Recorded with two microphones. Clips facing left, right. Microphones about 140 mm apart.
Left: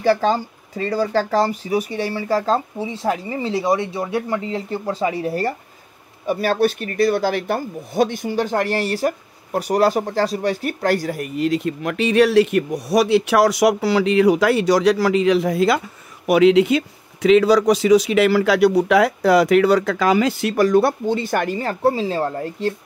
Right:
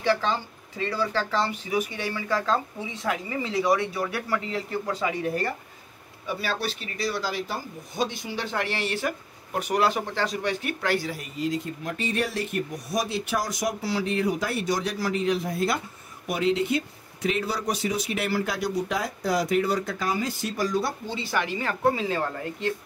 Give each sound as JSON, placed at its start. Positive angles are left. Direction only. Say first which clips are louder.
{"t": 0.0, "sound": "speech", "louder": "left 7 dB", "side_deg": 40}
{"t": 6.2, "sound": "speech", "louder": "left 11 dB", "side_deg": 50}